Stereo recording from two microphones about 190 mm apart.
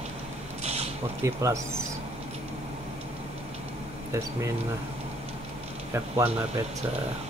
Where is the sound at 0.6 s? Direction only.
35° right (ahead or behind).